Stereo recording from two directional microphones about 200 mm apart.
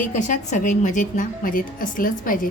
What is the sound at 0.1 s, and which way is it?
A woman's voice, 40° left (ahead or behind).